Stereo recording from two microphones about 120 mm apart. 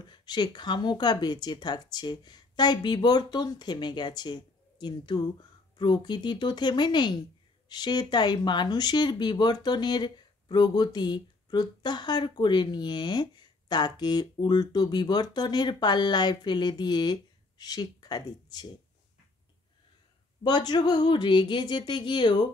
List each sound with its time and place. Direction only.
0.0 s speech: 40° left (ahead or behind)
20.4 s speech: 35° left (ahead or behind)